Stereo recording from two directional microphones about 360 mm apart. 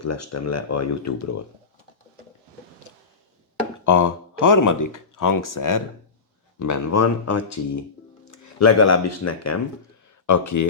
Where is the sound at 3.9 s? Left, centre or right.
Left.